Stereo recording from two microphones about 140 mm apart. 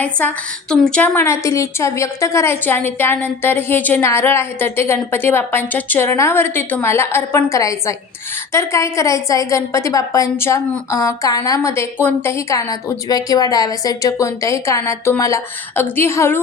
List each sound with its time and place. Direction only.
0.0 s a woman's voice: 10° left (ahead or behind)